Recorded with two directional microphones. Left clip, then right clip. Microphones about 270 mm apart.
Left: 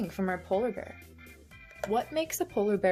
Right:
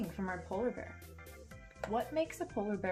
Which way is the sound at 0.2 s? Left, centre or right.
Left.